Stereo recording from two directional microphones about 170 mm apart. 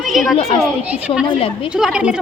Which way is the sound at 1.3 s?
35° left (ahead or behind).